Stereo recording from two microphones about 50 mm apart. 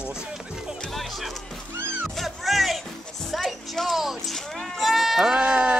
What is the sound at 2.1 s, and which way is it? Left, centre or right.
Music, centre.